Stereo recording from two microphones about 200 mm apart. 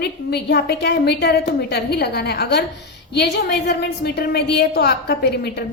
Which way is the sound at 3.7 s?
55° left (ahead or behind).